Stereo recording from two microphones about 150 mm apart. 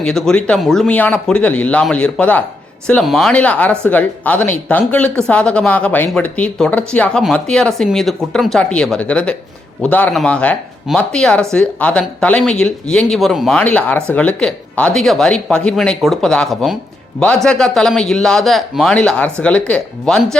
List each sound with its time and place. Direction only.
0.0 s speech: 5° left (ahead or behind)